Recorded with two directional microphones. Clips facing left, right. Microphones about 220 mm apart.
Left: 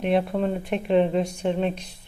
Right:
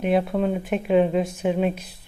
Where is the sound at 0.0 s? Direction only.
Centre (ahead or behind).